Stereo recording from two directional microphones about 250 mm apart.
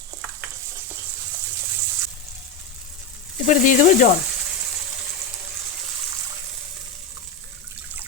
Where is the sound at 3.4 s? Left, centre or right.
Left.